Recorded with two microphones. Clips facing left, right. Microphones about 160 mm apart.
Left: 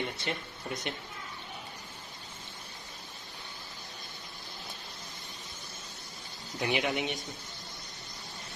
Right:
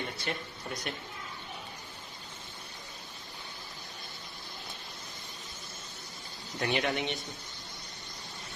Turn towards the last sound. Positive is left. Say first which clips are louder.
# even
turn(degrees=10)  # may be behind; listen again after turning